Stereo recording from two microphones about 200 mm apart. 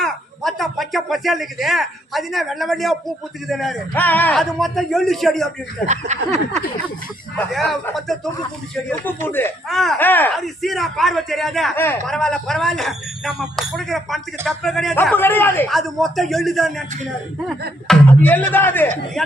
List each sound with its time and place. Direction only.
0.0 s speech: centre (ahead or behind)
5.9 s speech: 35° right (ahead or behind)
7.3 s a man's voice: centre (ahead or behind)
17.8 s a man's voice: 10° left (ahead or behind)